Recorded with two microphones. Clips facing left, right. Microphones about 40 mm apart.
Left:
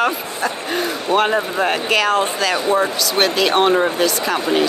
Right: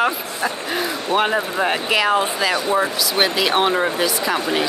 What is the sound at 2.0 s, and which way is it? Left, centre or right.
Speech, centre.